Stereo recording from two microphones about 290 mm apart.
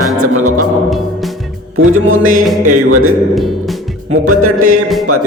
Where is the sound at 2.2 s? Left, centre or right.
Right.